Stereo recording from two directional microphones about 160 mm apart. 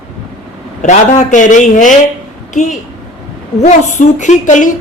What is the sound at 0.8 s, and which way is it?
A woman's voice, 50° left (ahead or behind).